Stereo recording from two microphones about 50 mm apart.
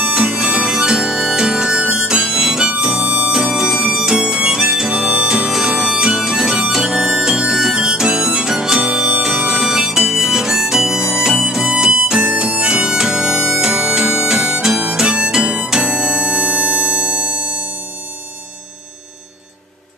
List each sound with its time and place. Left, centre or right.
0.0 s harmonica: right
2.8 s music: right
3.3 s harmonica: centre
6.7 s music: centre
15.0 s harmonica: centre